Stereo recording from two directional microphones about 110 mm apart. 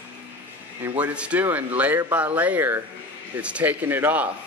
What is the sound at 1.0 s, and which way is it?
Speech, 10° right (ahead or behind).